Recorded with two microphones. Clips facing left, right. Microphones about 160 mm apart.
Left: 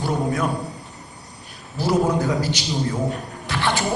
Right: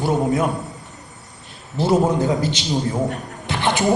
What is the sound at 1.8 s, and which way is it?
Speech, 20° right (ahead or behind).